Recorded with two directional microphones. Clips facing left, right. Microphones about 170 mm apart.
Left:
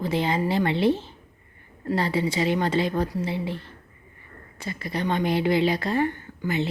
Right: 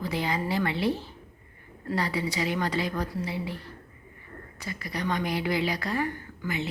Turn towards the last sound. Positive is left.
turn(degrees=30)  # may be behind; listen again after turning